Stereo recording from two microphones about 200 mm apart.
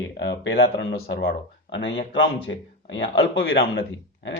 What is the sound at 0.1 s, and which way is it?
Speech, 60° left (ahead or behind).